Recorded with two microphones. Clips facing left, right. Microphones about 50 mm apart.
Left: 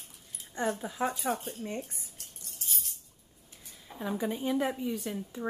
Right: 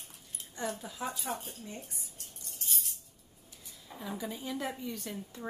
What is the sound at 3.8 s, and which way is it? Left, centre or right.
Speech, left.